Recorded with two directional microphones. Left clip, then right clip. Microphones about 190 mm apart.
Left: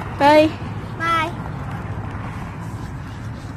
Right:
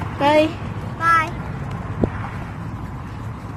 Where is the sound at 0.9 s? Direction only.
70° left (ahead or behind).